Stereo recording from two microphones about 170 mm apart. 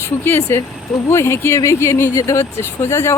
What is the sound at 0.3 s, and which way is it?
Speech, 15° left (ahead or behind).